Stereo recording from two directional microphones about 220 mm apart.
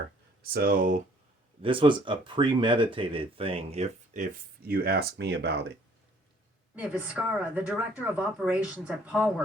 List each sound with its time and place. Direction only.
0.5 s speech: 40° right (ahead or behind)
1.6 s speech: 25° right (ahead or behind); by 5.7 s 50° right (ahead or behind)
6.7 s speech: 5° right (ahead or behind)